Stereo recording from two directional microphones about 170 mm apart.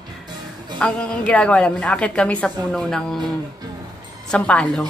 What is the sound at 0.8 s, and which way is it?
A man's voice, 5° left (ahead or behind).